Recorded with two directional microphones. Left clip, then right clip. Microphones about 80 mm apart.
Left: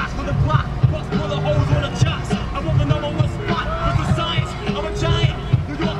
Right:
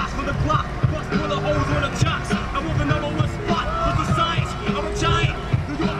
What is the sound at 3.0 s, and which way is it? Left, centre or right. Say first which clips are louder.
Music: left 1 dB; right.